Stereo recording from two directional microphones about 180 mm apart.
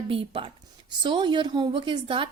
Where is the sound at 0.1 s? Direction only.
30° right (ahead or behind).